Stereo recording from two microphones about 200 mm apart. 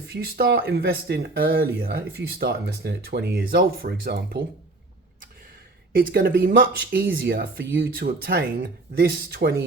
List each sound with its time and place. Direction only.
0.1 s speech: 50° right (ahead or behind)
5.9 s speech: 45° right (ahead or behind)